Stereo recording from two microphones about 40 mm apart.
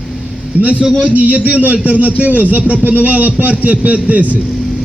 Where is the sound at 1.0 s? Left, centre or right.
Right.